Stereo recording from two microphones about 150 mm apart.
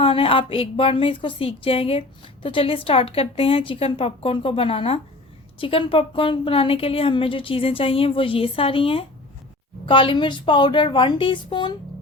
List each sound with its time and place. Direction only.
0.0 s speech: 35° left (ahead or behind)